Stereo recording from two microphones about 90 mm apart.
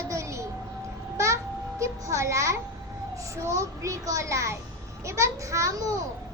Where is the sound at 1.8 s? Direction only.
35° right (ahead or behind).